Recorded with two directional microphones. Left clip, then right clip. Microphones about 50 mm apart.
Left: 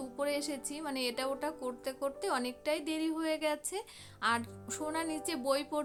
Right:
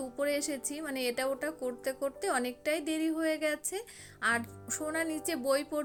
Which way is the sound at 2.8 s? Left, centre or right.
Right.